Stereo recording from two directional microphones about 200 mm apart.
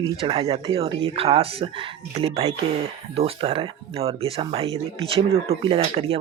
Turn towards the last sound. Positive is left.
turn(degrees=-30)  # may be behind; listen again after turning